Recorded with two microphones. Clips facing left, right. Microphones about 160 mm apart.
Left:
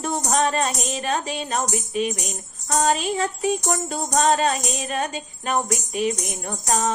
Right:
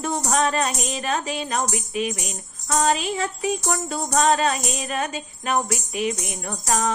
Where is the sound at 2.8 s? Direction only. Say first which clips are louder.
Left 1 dB; 45° left (ahead or behind).